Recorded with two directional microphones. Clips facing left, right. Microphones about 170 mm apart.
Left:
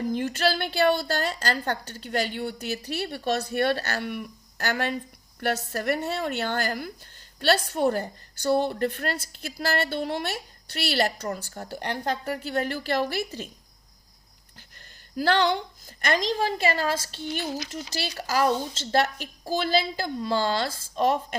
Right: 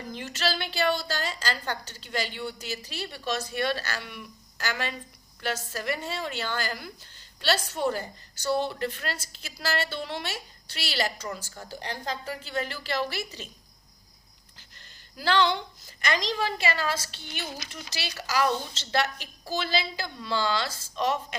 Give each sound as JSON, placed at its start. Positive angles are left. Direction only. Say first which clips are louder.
{"t": 0.1, "sound": "a woman's voice", "louder": "left 2 dB", "side_deg": 50}
{"t": 15.2, "sound": "a woman's voice", "louder": "left 2 dB", "side_deg": 50}